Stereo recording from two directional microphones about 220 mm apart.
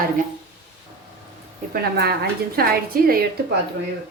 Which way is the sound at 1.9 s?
45° right (ahead or behind).